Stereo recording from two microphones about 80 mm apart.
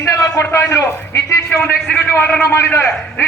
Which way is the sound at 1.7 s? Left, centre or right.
Left.